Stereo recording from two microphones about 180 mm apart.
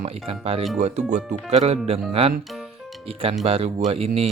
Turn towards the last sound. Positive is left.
turn(degrees=-35)  # may be behind; listen again after turning